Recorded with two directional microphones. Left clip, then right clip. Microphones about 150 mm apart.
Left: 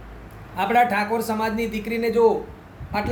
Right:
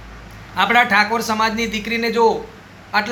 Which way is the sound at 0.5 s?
15° left (ahead or behind).